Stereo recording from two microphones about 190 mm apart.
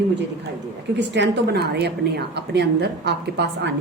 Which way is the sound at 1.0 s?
65° right (ahead or behind).